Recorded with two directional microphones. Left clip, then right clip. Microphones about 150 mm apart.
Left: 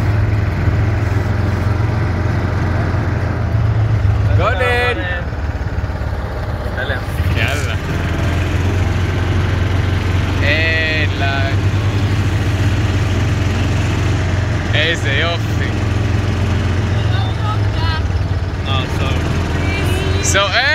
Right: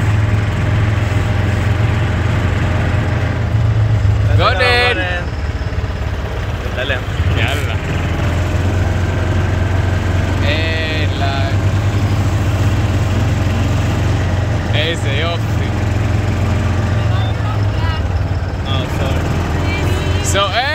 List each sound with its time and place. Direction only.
4.4 s a sound: 5° right (ahead or behind)
10.4 s vehicle: 5° right (ahead or behind)
14.7 s vehicle: 10° right (ahead or behind)
20.3 s vehicle: 15° right (ahead or behind)